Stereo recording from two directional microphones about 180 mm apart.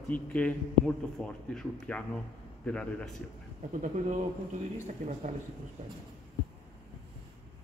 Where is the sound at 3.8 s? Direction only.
40° right (ahead or behind).